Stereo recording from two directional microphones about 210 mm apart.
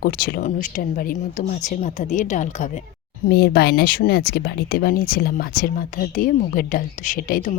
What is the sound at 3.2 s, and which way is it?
Speech, 50° left (ahead or behind).